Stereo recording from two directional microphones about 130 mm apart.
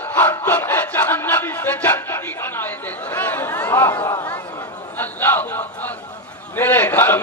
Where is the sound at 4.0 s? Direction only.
35° left (ahead or behind).